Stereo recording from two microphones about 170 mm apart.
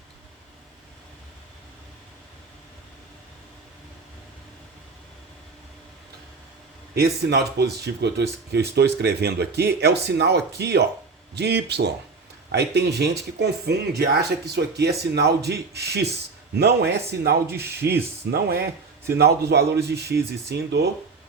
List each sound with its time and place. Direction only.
7.3 s speech: 75° right (ahead or behind)